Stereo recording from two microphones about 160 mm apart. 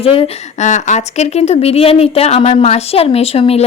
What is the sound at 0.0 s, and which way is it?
A woman's voice, 35° left (ahead or behind).